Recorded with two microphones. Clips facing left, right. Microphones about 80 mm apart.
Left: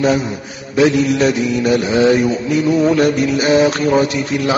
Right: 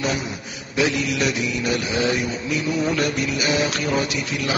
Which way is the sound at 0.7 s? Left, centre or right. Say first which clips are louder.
Left 9 dB; left.